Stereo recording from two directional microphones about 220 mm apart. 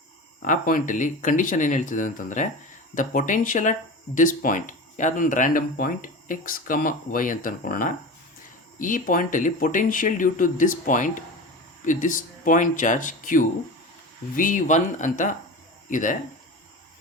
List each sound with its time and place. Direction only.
0.4 s speech: 35° left (ahead or behind)